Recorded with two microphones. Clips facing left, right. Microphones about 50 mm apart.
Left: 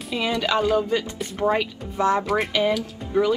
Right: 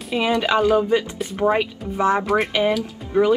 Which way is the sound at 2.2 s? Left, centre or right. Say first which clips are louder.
Right 3 dB; centre.